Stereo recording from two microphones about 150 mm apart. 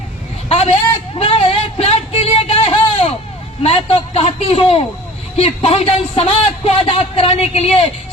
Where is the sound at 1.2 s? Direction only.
40° left (ahead or behind).